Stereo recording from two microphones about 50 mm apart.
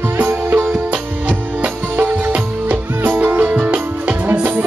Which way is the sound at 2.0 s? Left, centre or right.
Right.